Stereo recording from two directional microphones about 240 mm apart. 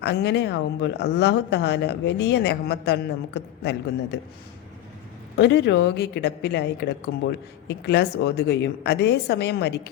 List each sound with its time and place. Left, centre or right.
0.0 s speech: left
5.4 s speech: left